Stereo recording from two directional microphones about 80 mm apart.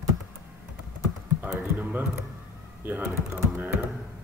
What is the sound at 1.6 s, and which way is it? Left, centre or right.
Speech, right.